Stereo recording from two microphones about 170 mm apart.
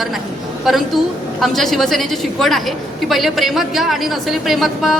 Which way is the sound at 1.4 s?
Centre (ahead or behind).